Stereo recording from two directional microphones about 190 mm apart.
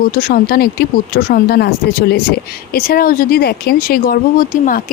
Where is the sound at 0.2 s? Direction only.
50° left (ahead or behind).